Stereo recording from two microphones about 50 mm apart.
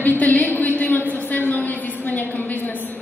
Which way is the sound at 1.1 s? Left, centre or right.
Left.